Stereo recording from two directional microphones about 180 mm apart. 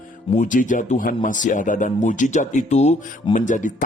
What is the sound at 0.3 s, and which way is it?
Speech, 45° left (ahead or behind).